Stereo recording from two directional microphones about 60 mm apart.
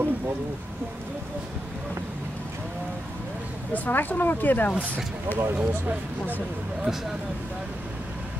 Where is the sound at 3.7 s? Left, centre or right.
Left.